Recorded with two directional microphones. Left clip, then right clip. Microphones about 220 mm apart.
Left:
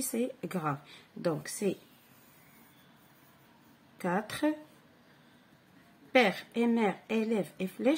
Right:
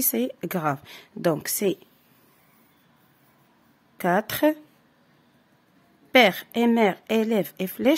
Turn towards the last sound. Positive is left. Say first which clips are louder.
# right 7 dB
turn(degrees=-50)  # may be behind; listen again after turning